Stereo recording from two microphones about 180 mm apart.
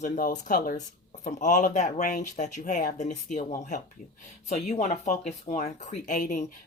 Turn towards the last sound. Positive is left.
turn(degrees=45)  # may be behind; listen again after turning